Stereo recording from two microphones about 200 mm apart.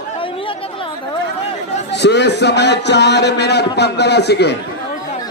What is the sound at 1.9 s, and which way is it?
Speech, 60° left (ahead or behind).